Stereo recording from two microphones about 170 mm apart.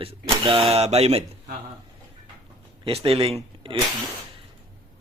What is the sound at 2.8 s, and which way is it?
Speech, 35° right (ahead or behind).